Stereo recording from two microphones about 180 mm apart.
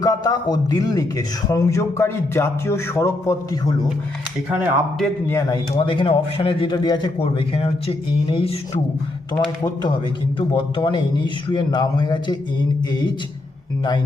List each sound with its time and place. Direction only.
0.0 s a man's voice: 20° left (ahead or behind)
4.4 s speech: centre (ahead or behind)
5.3 s a man's voice: 20° left (ahead or behind)
9.4 s a man's voice: 20° left (ahead or behind)